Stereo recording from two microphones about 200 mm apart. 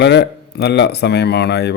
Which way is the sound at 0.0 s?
60° left (ahead or behind).